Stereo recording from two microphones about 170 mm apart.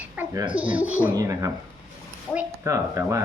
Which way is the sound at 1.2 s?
20° right (ahead or behind).